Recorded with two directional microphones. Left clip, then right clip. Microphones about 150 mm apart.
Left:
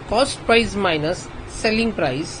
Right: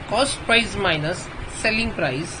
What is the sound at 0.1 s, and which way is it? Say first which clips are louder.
Speech: left 2 dB; 80° left.